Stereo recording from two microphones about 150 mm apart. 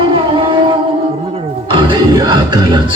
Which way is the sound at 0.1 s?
35° right (ahead or behind).